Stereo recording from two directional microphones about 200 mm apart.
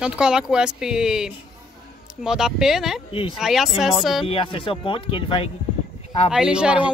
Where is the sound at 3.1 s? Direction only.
25° left (ahead or behind).